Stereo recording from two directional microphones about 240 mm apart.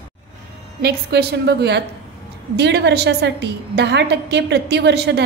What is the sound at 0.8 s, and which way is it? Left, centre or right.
A woman's voice, right.